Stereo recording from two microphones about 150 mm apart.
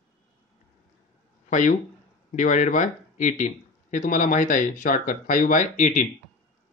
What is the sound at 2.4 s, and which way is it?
Speech, 60° left (ahead or behind).